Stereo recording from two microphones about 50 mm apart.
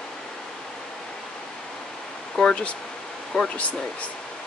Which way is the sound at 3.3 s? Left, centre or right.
Centre.